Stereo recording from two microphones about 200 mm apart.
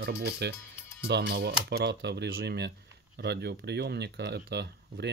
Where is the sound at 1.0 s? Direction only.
50° right (ahead or behind).